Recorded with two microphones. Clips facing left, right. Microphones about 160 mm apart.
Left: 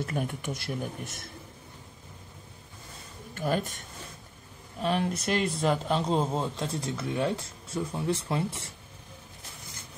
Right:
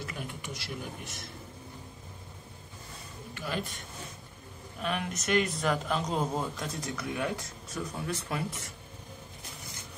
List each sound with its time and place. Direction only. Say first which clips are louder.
0.0 s speech: left 8 dB; 50° left (ahead or behind)
3.3 s speech: left 7 dB; 45° left (ahead or behind)
4.7 s speech: left 6 dB; 30° left (ahead or behind)